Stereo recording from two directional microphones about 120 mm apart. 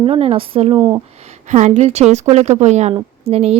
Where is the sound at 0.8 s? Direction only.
30° right (ahead or behind).